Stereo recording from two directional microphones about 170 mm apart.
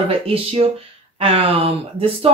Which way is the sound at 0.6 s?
40° right (ahead or behind).